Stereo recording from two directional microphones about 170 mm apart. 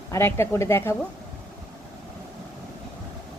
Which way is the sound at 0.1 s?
15° left (ahead or behind).